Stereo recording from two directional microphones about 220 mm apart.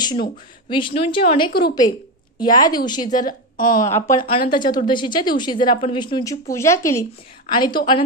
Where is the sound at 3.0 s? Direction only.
40° left (ahead or behind).